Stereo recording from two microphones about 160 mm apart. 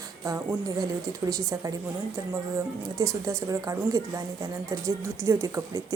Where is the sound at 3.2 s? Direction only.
20° right (ahead or behind).